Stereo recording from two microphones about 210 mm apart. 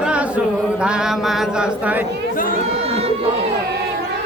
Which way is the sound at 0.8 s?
5° right (ahead or behind).